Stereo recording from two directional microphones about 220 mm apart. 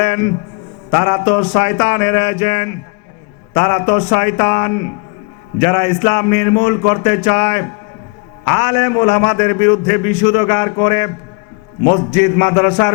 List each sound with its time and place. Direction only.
0.0 s a man's voice: 15° left (ahead or behind)
12.1 s a man's voice: 15° left (ahead or behind)